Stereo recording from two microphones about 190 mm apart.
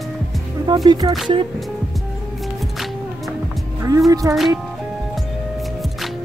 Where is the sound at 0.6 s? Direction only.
20° right (ahead or behind).